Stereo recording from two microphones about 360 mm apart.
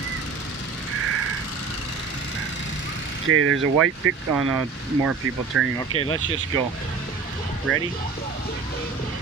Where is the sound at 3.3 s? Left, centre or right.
Right.